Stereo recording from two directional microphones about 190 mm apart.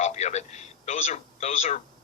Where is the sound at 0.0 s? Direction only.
35° left (ahead or behind).